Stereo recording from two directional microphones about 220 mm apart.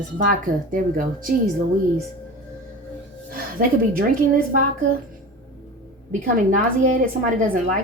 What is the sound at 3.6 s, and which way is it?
Speech, 40° right (ahead or behind).